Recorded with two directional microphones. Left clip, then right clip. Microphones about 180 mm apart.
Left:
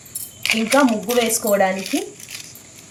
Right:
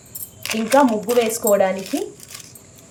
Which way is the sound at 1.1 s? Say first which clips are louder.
Right 2 dB; 5° left (ahead or behind).